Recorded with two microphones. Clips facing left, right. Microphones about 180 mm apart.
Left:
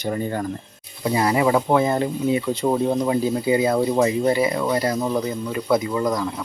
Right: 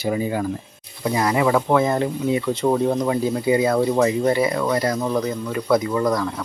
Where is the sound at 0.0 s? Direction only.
10° right (ahead or behind).